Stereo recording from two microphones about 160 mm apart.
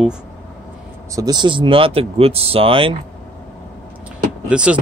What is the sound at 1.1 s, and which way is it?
Speech, 25° right (ahead or behind).